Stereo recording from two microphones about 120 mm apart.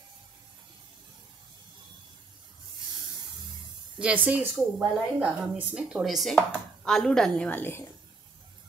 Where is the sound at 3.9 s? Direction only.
10° right (ahead or behind); by 7.8 s 15° left (ahead or behind).